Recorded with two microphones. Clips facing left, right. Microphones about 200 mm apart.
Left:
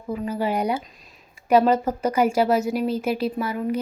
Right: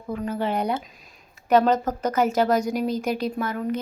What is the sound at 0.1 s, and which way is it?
A woman's voice, 5° left (ahead or behind).